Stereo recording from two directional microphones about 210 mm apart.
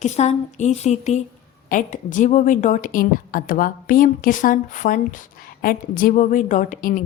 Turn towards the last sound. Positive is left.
turn(degrees=40)  # may be behind; listen again after turning